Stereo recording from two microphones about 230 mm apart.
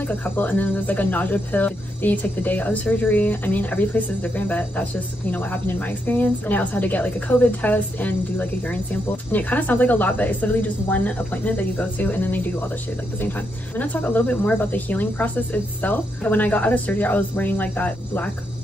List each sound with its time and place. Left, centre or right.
0.0 s a woman's voice: centre
13.7 s a woman's voice: centre